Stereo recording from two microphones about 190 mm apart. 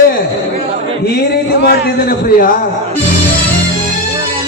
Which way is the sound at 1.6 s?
55° left (ahead or behind).